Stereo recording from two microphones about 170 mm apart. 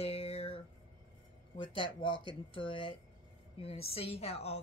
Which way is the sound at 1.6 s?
30° left (ahead or behind).